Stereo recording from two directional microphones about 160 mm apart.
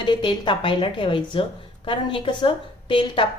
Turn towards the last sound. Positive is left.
turn(degrees=30)  # may be behind; listen again after turning